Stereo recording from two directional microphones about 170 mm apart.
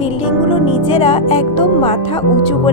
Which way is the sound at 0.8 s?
30° left (ahead or behind).